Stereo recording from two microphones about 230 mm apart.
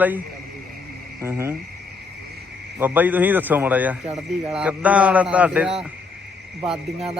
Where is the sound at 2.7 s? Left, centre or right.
Centre.